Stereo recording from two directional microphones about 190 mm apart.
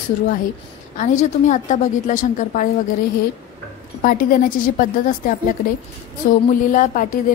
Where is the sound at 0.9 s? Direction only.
40° left (ahead or behind).